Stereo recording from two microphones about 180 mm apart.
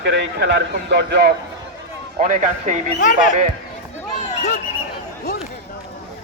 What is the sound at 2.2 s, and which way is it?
Speech, 45° right (ahead or behind).